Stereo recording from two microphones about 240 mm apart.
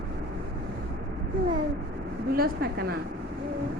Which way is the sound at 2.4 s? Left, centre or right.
Right.